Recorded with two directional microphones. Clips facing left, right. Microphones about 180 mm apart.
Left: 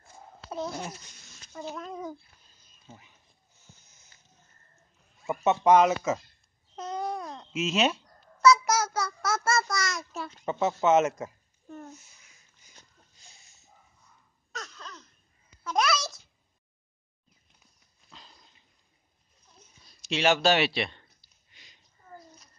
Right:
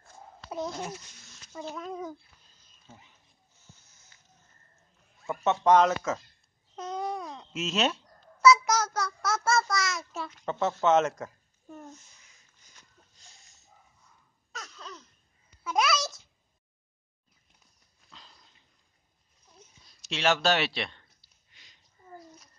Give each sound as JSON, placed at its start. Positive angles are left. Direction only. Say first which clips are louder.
{"t": 0.7, "sound": "speech", "louder": "even", "side_deg": 0}
{"t": 2.9, "sound": "speech", "louder": "left 2 dB", "side_deg": 20}
{"t": 3.8, "sound": "snake", "louder": "even", "side_deg": 15}
{"t": 5.2, "sound": "speech", "louder": "left 2 dB", "side_deg": 10}
{"t": 6.7, "sound": "babbling", "louder": "left 1 dB", "side_deg": 0}
{"t": 8.4, "sound": "a sound", "louder": "even", "side_deg": -5}
{"t": 8.7, "sound": "child singing", "louder": "left 1 dB", "side_deg": 5}
{"t": 10.4, "sound": "speech", "louder": "left 1 dB", "side_deg": 10}
{"t": 11.8, "sound": "a sound", "louder": "left 1 dB", "side_deg": 5}
{"t": 14.5, "sound": "a sound", "louder": "left 1 dB", "side_deg": -5}
{"t": 18.1, "sound": "dog", "louder": "left 2 dB", "side_deg": 10}
{"t": 20.1, "sound": "speech", "louder": "left 2 dB", "side_deg": 5}